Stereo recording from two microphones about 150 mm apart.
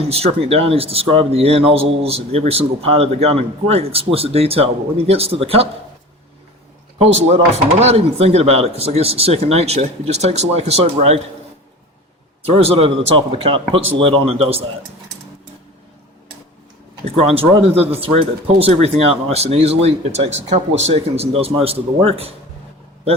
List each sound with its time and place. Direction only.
0.1 s speech: 40° right (ahead or behind)
7.0 s speech: 45° right (ahead or behind)
12.5 s speech: 40° right (ahead or behind)
17.1 s speech: 40° right (ahead or behind)